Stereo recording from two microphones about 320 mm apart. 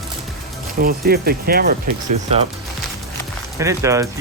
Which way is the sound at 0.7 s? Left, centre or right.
Right.